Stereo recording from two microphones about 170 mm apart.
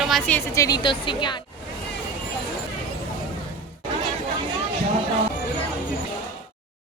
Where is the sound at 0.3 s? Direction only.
15° left (ahead or behind).